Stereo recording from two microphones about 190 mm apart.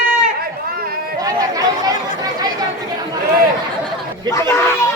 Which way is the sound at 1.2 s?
20° right (ahead or behind).